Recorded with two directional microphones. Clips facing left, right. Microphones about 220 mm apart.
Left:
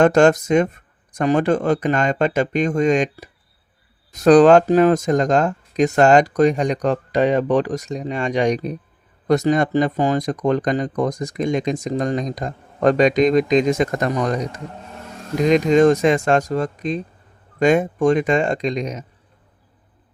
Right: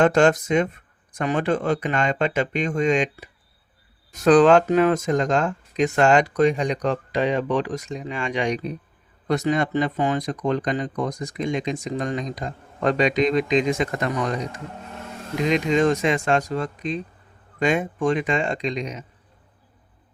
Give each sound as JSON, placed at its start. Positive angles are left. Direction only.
{"t": 0.0, "sound": "speech", "side_deg": 45}
{"t": 15.4, "sound": "speech", "side_deg": 45}